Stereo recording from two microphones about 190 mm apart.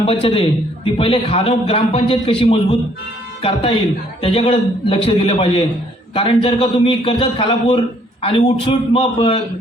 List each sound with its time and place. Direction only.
0.0 s a man's voice: 30° left (ahead or behind)